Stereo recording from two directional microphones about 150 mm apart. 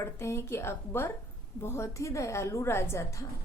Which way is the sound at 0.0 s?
20° left (ahead or behind).